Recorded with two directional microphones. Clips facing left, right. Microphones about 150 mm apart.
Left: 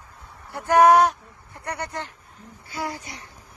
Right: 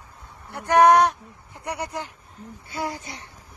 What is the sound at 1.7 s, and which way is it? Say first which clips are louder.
Speech: right 1 dB; 10° right (ahead or behind).